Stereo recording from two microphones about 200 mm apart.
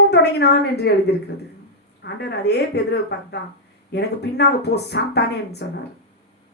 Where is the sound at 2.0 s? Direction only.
55° left (ahead or behind).